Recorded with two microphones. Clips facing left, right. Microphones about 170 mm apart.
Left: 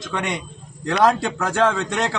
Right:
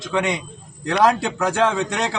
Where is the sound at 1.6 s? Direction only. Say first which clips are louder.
Left 1 dB; 15° right (ahead or behind).